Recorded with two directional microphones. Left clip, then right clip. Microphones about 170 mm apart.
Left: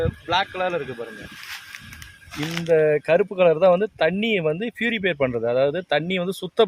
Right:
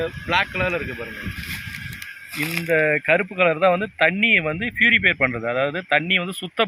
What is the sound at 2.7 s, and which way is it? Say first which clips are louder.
Speech: left 1 dB; 35° left (ahead or behind).